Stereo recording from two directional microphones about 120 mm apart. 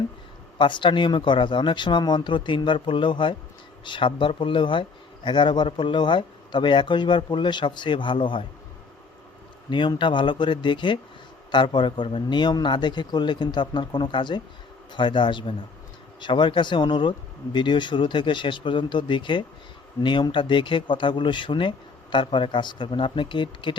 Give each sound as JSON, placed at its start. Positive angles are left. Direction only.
{"t": 0.6, "sound": "a man's voice", "side_deg": 45}
{"t": 9.6, "sound": "a man's voice", "side_deg": 40}